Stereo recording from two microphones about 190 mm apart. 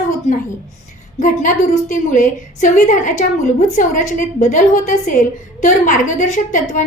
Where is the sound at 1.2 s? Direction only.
40° left (ahead or behind).